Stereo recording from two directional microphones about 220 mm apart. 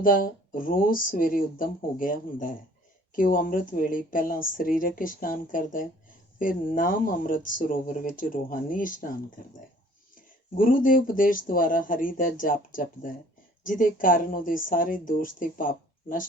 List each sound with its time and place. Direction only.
0.0 s speech: 40° left (ahead or behind)
10.6 s speech: 40° left (ahead or behind)